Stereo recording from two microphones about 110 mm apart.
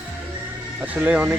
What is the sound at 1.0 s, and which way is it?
Speech, 10° right (ahead or behind).